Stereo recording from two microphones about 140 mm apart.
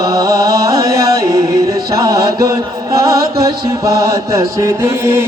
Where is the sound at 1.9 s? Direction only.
25° right (ahead or behind).